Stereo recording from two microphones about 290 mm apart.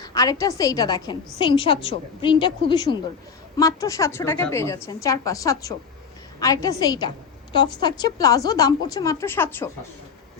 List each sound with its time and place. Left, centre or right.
0.0 s speech: centre